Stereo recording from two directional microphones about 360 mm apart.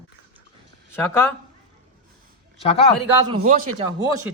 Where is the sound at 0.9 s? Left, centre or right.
Centre.